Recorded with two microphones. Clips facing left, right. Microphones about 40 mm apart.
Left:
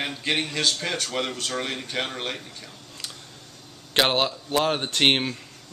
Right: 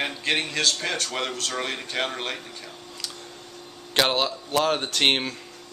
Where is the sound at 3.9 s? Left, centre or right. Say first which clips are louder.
Left 1 dB; centre.